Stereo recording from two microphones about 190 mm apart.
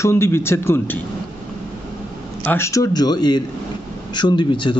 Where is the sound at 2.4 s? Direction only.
10° left (ahead or behind).